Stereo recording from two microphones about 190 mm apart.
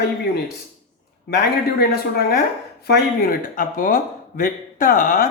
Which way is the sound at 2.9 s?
50° left (ahead or behind).